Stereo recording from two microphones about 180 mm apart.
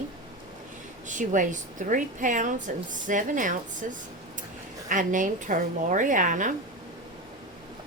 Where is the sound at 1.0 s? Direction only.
45° right (ahead or behind).